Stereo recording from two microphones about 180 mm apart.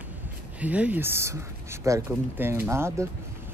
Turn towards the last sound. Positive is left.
turn(degrees=-15)  # may be behind; listen again after turning